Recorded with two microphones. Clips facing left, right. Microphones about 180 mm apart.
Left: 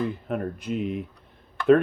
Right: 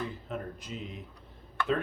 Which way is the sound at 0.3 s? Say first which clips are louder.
Left 10 dB; 60° left (ahead or behind).